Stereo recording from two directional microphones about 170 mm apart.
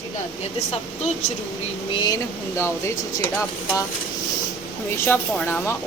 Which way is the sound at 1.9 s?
25° left (ahead or behind).